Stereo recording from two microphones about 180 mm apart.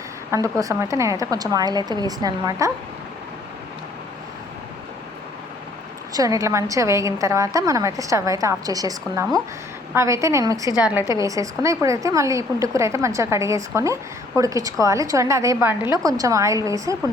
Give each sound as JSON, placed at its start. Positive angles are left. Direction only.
{"t": 0.3, "sound": "a woman's voice", "side_deg": -15}
{"t": 6.1, "sound": "a woman's voice", "side_deg": -20}